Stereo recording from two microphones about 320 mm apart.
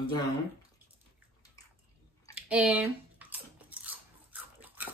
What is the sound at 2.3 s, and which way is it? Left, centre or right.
Bathtub, centre.